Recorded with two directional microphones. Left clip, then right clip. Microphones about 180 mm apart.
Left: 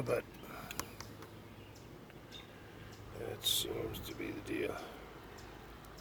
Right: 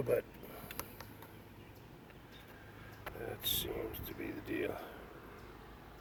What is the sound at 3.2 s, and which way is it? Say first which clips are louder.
Whispering: left 3 dB; 10° right (ahead or behind).